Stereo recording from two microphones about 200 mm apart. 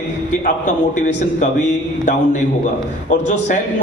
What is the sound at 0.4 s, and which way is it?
A man's voice, 40° left (ahead or behind).